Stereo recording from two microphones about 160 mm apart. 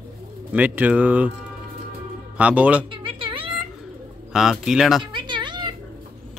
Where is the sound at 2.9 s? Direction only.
30° right (ahead or behind).